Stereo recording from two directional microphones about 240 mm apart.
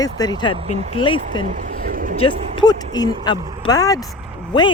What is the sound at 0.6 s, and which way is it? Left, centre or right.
Speech, right.